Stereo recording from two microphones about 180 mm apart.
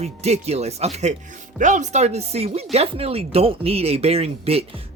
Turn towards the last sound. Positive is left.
turn(degrees=-35)  # may be behind; listen again after turning